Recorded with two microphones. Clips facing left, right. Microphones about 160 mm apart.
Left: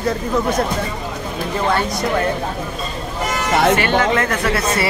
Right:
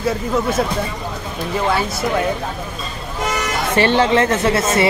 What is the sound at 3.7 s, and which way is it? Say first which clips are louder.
Speech: right 2 dB; 30° right (ahead or behind).